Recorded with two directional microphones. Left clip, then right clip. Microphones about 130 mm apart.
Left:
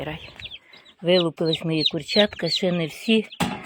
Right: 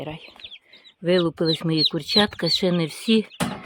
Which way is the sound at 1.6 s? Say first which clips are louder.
Right 1 dB; 35° right (ahead or behind).